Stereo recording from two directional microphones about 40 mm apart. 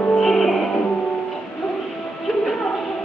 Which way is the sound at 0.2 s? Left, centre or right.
Centre.